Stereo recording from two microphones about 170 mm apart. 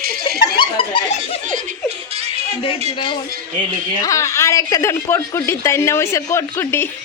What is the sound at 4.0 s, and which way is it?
A woman's voice, 20° left (ahead or behind).